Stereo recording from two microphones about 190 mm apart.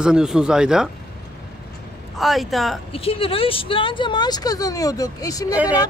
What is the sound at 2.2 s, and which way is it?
Speech, centre (ahead or behind).